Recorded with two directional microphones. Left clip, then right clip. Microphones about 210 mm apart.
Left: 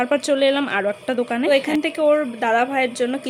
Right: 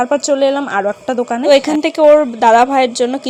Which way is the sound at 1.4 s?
25° right (ahead or behind).